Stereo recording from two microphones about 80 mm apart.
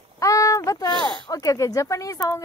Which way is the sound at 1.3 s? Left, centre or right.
Left.